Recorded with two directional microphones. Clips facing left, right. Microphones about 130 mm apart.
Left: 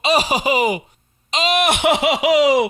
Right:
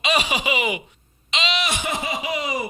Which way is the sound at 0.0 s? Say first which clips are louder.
Left 5 dB; 35° left (ahead or behind).